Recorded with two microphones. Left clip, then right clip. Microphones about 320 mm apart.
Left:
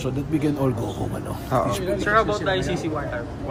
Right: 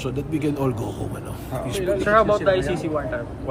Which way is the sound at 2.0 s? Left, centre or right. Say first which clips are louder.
Right 3 dB; right.